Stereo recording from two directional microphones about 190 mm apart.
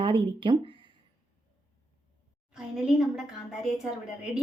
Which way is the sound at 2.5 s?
Centre (ahead or behind).